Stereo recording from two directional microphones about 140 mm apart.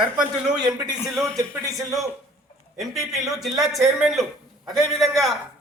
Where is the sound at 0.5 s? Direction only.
30° right (ahead or behind).